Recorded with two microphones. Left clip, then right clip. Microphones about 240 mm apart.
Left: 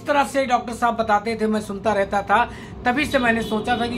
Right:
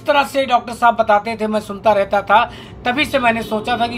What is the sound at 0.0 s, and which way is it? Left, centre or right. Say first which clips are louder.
A man's voice: right 4 dB; centre.